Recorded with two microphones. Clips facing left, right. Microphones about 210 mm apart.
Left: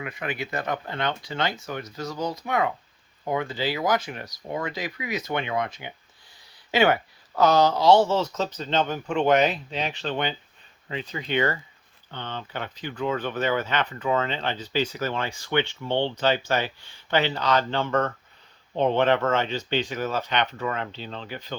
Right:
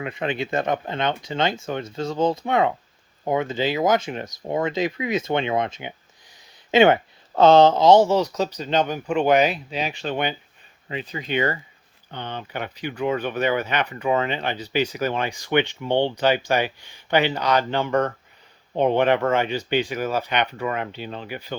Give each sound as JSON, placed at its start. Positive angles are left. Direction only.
{"t": 0.0, "sound": "speech", "side_deg": -25}